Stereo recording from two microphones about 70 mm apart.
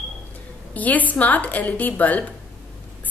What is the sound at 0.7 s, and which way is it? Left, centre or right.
A woman's voice, left.